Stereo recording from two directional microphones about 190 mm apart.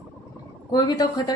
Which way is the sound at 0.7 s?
20° left (ahead or behind).